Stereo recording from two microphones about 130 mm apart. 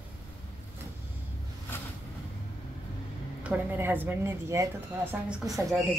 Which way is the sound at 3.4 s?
15° right (ahead or behind).